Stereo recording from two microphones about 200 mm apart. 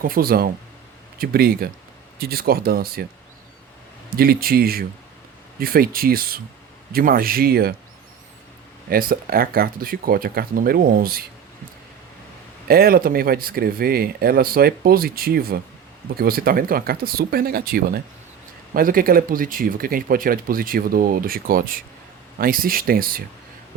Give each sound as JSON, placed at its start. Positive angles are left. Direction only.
{"t": 0.0, "sound": "speech", "side_deg": -45}
{"t": 4.1, "sound": "speech", "side_deg": -50}
{"t": 8.9, "sound": "speech", "side_deg": -45}
{"t": 12.6, "sound": "speech", "side_deg": -50}